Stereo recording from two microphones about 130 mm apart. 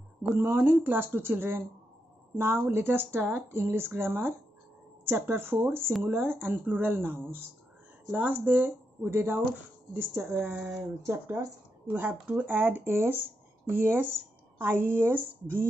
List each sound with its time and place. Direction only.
0.4 s speech: 15° right (ahead or behind)
10.4 s speech: 10° right (ahead or behind)
11.1 s speech: 20° right (ahead or behind)